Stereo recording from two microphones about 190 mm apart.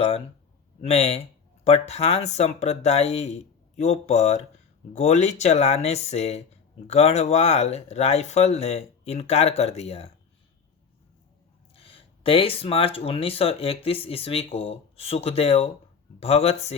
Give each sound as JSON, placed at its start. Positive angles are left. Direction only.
{"t": 0.8, "sound": "speech", "side_deg": 35}
{"t": 11.7, "sound": "speech", "side_deg": 30}